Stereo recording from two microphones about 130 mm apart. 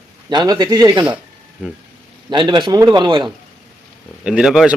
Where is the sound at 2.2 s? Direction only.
35° right (ahead or behind).